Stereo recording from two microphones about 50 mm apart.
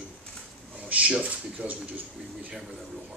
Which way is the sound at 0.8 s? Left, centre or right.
Right.